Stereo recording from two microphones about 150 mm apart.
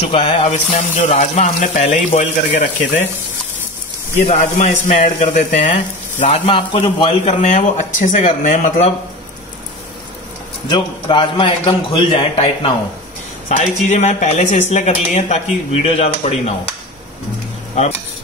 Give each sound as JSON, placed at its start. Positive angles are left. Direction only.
{"t": 0.0, "sound": "speech", "side_deg": 40}
{"t": 4.2, "sound": "speech", "side_deg": 50}
{"t": 6.1, "sound": "speech", "side_deg": 45}
{"t": 10.7, "sound": "a man's voice", "side_deg": 35}
{"t": 13.5, "sound": "speech", "side_deg": 55}